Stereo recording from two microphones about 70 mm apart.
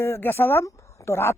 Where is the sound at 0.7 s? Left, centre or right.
Left.